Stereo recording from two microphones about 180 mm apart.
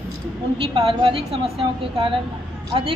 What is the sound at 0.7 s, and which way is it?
A woman's voice, 30° right (ahead or behind).